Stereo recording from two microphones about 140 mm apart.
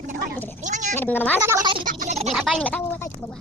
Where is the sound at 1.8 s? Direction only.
75° right (ahead or behind).